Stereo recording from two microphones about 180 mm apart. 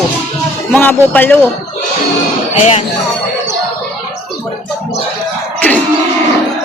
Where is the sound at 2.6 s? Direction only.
35° left (ahead or behind).